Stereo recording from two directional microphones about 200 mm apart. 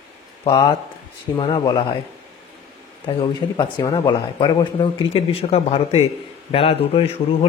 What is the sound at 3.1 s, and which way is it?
Speech, 25° left (ahead or behind).